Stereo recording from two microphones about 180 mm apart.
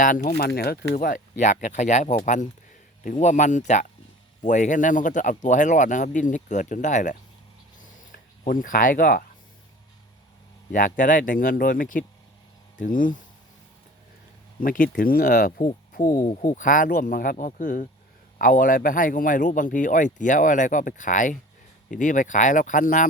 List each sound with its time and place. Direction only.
0.0 s speech: 45° left (ahead or behind)
7.8 s a sound: 50° left (ahead or behind)
10.7 s speech: 45° left (ahead or behind)
14.6 s speech: 50° left (ahead or behind)